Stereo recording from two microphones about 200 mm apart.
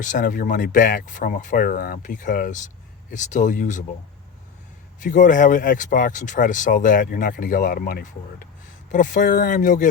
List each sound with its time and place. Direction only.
0.0 s speech: 40° left (ahead or behind)
4.9 s speech: 40° left (ahead or behind)